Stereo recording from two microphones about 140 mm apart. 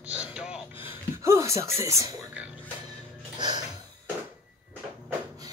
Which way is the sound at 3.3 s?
30° right (ahead or behind).